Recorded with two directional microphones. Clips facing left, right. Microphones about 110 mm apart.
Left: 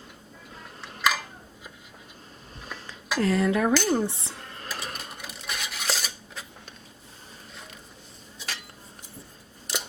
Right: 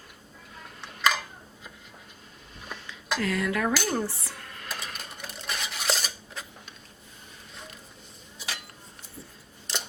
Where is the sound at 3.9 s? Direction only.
20° left (ahead or behind).